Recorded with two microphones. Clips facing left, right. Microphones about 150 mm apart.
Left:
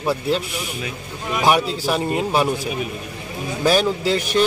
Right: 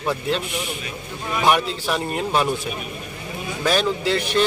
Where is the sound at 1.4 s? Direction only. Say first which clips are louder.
Left 2 dB; 10° left (ahead or behind).